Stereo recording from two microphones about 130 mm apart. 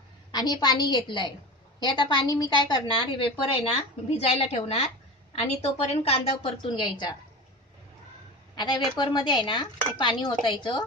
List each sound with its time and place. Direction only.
0.3 s a woman's voice: 30° left (ahead or behind)
8.5 s speech: 35° left (ahead or behind)